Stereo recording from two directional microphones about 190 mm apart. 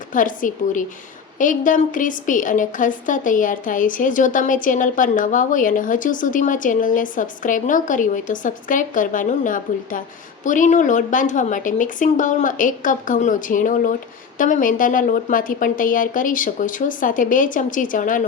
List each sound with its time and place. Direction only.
0.1 s a woman's voice: 45° left (ahead or behind)